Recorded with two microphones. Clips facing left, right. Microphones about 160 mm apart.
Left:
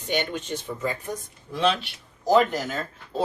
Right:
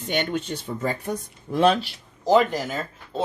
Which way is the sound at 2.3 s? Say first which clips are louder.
Right 1 dB; 10° right (ahead or behind).